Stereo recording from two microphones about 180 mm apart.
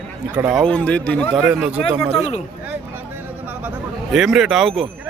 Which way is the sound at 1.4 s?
5° right (ahead or behind).